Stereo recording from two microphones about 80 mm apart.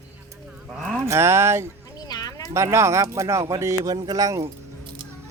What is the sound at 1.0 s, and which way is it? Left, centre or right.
Speech, right.